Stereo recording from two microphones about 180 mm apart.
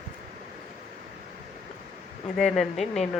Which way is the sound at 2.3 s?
Centre (ahead or behind).